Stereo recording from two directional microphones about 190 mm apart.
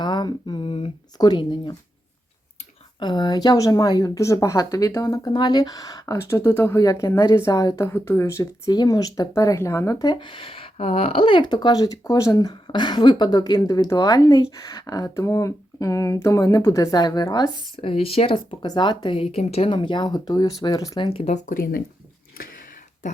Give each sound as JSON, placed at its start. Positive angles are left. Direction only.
{"t": 0.0, "sound": "speech", "side_deg": 25}
{"t": 3.0, "sound": "speech", "side_deg": 20}
{"t": 21.1, "sound": "speech", "side_deg": 35}
{"t": 22.4, "sound": "a sound", "side_deg": 50}